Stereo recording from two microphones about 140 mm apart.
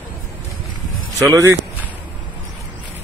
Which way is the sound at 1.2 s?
25° right (ahead or behind).